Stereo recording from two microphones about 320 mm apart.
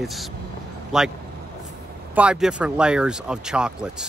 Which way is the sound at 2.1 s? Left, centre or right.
Centre.